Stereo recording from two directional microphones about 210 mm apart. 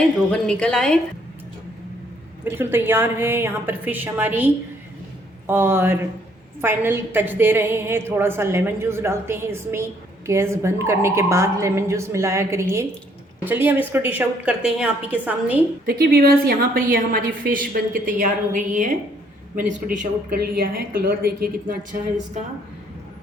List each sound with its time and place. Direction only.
0.3 s a woman's voice: 5° left (ahead or behind)
2.4 s a woman's voice: 10° right (ahead or behind)
15.9 s a woman's voice: 45° right (ahead or behind)